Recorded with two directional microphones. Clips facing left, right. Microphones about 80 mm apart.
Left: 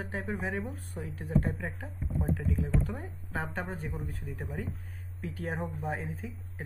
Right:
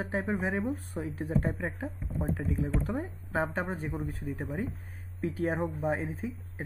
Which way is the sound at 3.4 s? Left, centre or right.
Centre.